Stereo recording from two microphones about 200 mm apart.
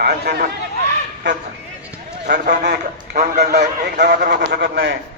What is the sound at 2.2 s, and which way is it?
A man's voice, 45° right (ahead or behind).